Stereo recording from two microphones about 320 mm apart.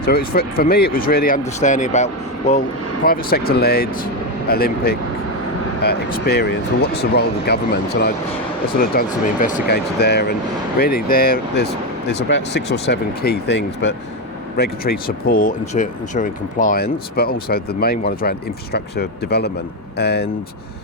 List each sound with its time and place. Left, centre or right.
0.0 s speech: left
8.8 s speech: left